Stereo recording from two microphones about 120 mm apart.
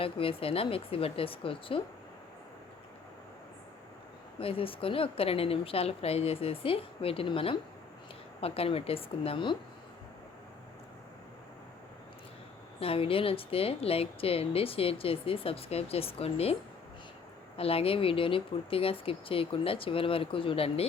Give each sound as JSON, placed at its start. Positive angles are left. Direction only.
{"t": 0.0, "sound": "a woman's voice", "side_deg": 50}
{"t": 4.4, "sound": "a woman's voice", "side_deg": 50}
{"t": 12.8, "sound": "a woman's voice", "side_deg": 50}
{"t": 17.6, "sound": "a woman's voice", "side_deg": 55}